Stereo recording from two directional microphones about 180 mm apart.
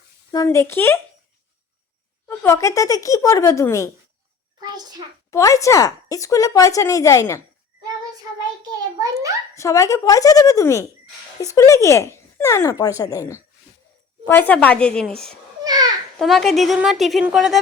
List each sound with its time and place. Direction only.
0.3 s speech: 15° left (ahead or behind)
2.2 s speech: 15° left (ahead or behind)
4.6 s a child's voice: 20° right (ahead or behind)
5.3 s speech: 15° left (ahead or behind)
8.2 s a sound: 20° right (ahead or behind)
9.6 s speech: 15° left (ahead or behind)
15.6 s babbling: 20° right (ahead or behind)
16.1 s speech: centre (ahead or behind)